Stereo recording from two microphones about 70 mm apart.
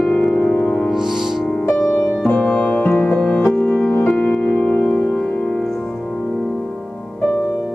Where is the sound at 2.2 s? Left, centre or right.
Left.